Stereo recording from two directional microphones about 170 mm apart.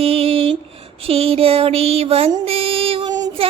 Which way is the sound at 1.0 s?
35° right (ahead or behind).